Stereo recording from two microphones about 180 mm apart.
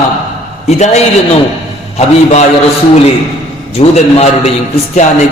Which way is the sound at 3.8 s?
35° left (ahead or behind).